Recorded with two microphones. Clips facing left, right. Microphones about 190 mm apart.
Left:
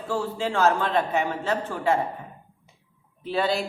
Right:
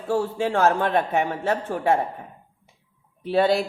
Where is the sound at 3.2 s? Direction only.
55° right (ahead or behind).